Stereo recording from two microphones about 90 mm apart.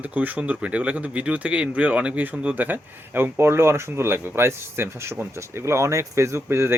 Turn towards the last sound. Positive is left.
turn(degrees=-30)  # may be behind; listen again after turning